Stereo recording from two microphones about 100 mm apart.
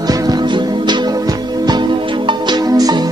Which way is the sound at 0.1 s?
45° right (ahead or behind).